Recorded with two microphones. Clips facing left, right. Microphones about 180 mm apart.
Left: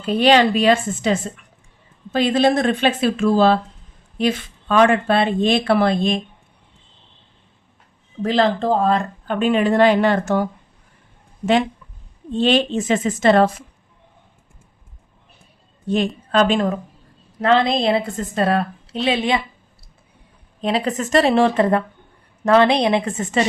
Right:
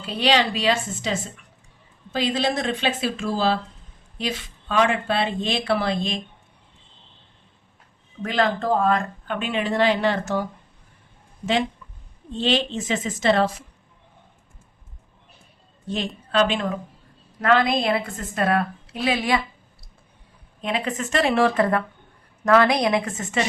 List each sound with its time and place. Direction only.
0.0 s speech: 50° left (ahead or behind)
2.1 s a woman's voice: 55° left (ahead or behind)
8.2 s speech: 30° left (ahead or behind); by 10.5 s 55° left (ahead or behind)
12.4 s speech: 50° left (ahead or behind)
16.3 s speech: 45° left (ahead or behind)
17.4 s a woman's voice: 25° left (ahead or behind)
20.6 s a woman's voice: 35° left (ahead or behind)